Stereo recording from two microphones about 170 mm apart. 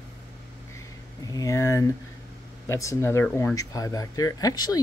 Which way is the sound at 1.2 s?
20° left (ahead or behind).